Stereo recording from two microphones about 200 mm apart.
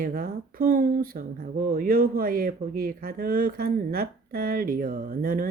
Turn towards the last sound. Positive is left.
turn(degrees=-45)  # may be behind; listen again after turning